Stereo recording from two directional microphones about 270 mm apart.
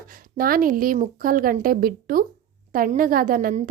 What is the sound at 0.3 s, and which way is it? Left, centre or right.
Speech, right.